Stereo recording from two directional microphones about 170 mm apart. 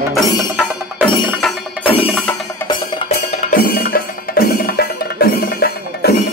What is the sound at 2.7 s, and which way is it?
Music, 35° left (ahead or behind).